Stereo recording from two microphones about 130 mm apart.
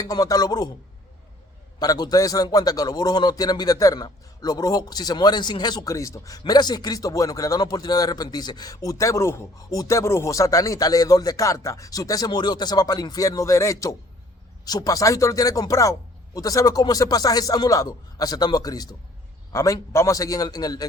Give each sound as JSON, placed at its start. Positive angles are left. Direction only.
{"t": 0.0, "sound": "a man's voice", "side_deg": 30}
{"t": 1.8, "sound": "a man's voice", "side_deg": 30}